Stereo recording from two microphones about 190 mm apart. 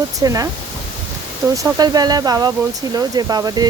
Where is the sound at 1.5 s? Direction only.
20° right (ahead or behind).